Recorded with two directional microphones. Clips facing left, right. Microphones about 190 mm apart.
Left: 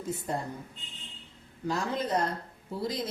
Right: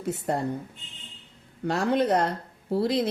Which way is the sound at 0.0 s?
65° right (ahead or behind).